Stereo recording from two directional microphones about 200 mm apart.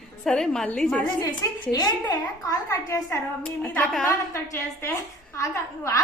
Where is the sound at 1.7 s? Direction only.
20° left (ahead or behind).